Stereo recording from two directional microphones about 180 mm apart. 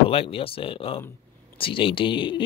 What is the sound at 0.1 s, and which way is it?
Speech, 30° left (ahead or behind).